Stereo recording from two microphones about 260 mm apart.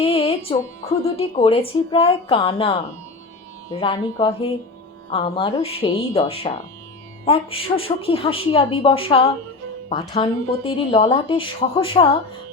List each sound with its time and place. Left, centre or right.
0.0 s a woman's voice: left
3.8 s a woman's voice: centre